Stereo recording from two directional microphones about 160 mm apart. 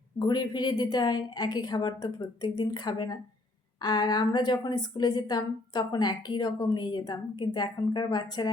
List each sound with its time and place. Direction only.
0.2 s a woman's voice: 25° left (ahead or behind)